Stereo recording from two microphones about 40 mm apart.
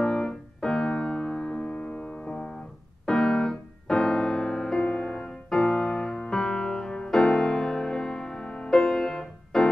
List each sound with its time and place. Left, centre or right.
0.0 s keyboard: left